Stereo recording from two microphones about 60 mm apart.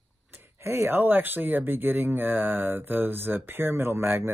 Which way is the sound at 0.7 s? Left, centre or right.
Right.